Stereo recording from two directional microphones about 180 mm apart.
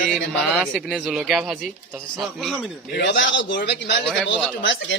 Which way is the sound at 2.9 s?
75° left (ahead or behind).